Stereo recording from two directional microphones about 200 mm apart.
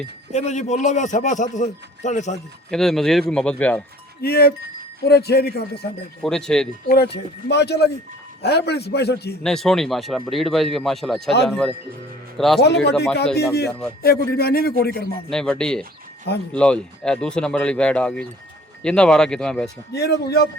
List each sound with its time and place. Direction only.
0.3 s a man's voice: 35° left (ahead or behind)
2.6 s speech: centre (ahead or behind)
4.2 s a man's voice: 50° left (ahead or behind)
6.2 s speech: 5° left (ahead or behind)
6.8 s speech: 50° left (ahead or behind)
9.4 s speech: centre (ahead or behind)
12.6 s a man's voice: 60° left (ahead or behind)
15.3 s speech: 5° left (ahead or behind)
19.9 s a man's voice: 50° left (ahead or behind)